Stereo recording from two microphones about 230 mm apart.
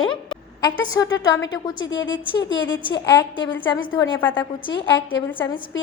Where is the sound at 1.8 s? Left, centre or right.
Left.